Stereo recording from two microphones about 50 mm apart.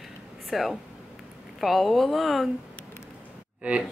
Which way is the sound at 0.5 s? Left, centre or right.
Centre.